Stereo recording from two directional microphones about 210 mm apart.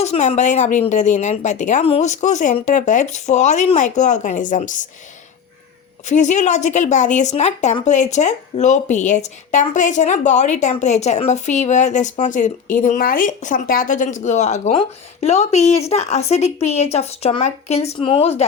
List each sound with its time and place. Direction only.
0.0 s speech: 35° left (ahead or behind)
6.1 s speech: 35° left (ahead or behind)